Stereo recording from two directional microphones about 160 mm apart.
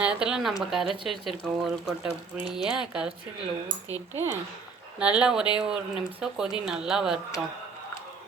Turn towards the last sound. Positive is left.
turn(degrees=-5)  # may be behind; listen again after turning